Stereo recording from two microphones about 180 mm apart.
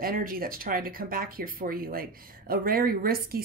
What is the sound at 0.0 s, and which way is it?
Speech, 55° right (ahead or behind).